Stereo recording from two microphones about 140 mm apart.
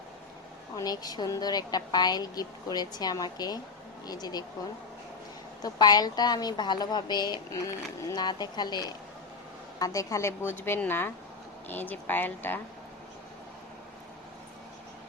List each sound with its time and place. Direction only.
0.8 s a woman's voice: 30° left (ahead or behind)
5.6 s a woman's voice: 30° left (ahead or behind); by 12.5 s 15° left (ahead or behind)